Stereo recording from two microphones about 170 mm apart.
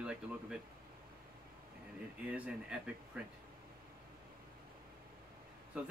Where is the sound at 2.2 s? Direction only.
10° right (ahead or behind).